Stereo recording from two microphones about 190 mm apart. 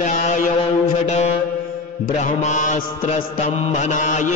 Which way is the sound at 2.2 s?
40° left (ahead or behind).